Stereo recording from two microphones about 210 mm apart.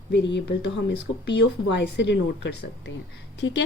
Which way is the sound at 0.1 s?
55° left (ahead or behind).